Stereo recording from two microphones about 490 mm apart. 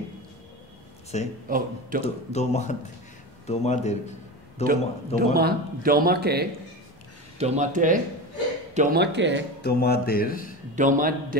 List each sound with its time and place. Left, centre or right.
1.1 s speech: centre
1.5 s a man's voice: centre
2.3 s speech: centre
4.6 s a man's voice: centre
9.6 s speech: centre
10.8 s a man's voice: centre